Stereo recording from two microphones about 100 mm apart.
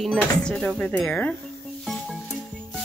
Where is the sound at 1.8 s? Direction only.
Centre (ahead or behind).